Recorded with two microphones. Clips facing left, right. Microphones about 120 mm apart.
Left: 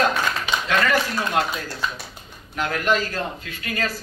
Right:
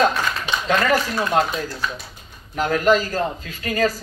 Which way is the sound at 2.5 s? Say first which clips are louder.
Right 5 dB; 35° right (ahead or behind).